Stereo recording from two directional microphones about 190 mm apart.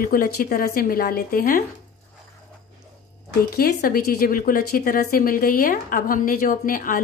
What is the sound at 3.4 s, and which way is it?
Speech, 50° left (ahead or behind).